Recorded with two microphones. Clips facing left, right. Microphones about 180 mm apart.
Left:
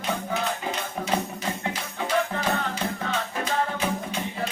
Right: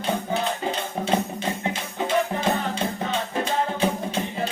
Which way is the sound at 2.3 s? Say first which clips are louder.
Right 3 dB; 20° right (ahead or behind).